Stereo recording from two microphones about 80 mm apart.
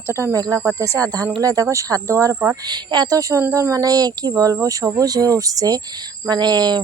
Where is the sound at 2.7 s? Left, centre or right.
Right.